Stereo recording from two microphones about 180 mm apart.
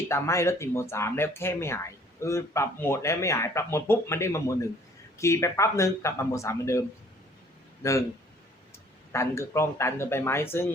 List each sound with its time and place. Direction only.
0.1 s speech: 15° left (ahead or behind)
9.1 s speech: 15° left (ahead or behind)